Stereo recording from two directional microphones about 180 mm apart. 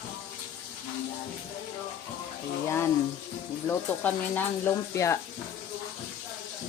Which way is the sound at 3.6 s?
10° left (ahead or behind).